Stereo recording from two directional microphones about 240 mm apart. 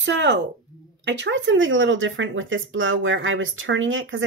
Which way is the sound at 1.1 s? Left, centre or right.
Right.